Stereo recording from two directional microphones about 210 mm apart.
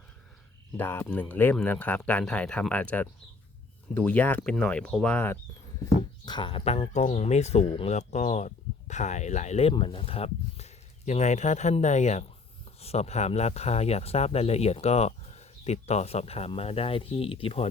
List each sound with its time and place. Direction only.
0.8 s speech: 10° left (ahead or behind)
5.8 s speech: 20° left (ahead or behind)